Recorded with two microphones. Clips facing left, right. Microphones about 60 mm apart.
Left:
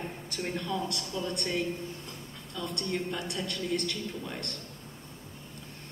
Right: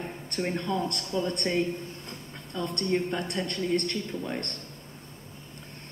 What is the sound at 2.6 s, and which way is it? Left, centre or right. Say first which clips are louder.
Speech: right 4 dB; right.